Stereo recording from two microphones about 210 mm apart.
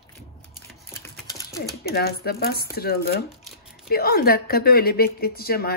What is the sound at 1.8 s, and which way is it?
A woman's voice, 50° left (ahead or behind).